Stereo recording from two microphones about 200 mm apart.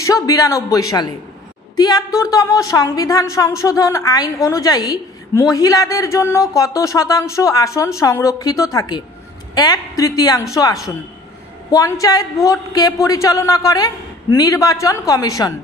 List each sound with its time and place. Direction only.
0.0 s a woman's voice: 15° left (ahead or behind)